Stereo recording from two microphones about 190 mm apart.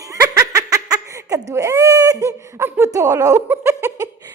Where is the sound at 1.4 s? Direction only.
15° right (ahead or behind).